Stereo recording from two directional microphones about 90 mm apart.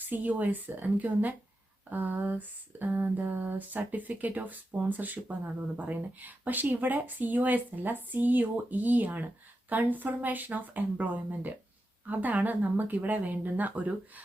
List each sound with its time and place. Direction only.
0.0 s speech: 20° right (ahead or behind)